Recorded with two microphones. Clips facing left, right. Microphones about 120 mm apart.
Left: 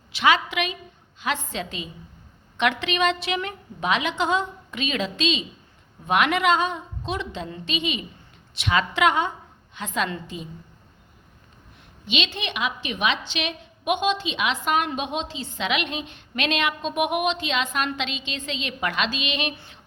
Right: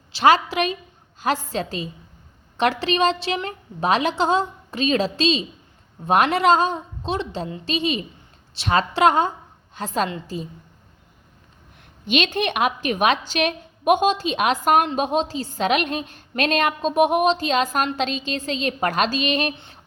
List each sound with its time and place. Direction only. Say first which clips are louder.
0.1 s a woman's voice: right 5 dB; 35° right (ahead or behind)
12.0 s a woman's voice: right 7 dB; 50° right (ahead or behind)